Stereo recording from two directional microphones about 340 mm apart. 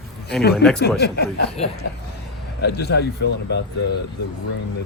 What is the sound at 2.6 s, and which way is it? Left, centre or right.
Speech, left.